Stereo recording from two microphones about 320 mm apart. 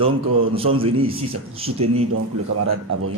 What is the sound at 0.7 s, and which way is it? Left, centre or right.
A man's voice, centre.